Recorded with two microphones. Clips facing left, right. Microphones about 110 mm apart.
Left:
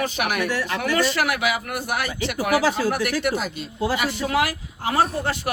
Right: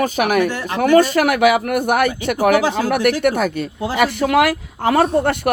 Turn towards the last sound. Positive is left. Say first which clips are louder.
# right 6 dB
turn(degrees=-60)  # may be behind; listen again after turning